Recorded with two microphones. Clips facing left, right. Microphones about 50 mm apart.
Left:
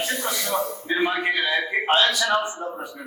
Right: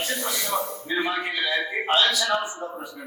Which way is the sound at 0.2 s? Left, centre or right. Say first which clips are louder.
Left 2 dB; left.